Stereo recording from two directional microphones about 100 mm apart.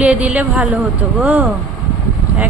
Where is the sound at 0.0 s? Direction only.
15° right (ahead or behind).